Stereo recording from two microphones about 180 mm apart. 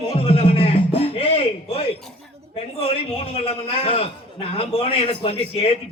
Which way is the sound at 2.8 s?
30° left (ahead or behind).